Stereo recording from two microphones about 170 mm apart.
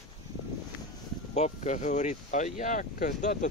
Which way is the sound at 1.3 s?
40° left (ahead or behind).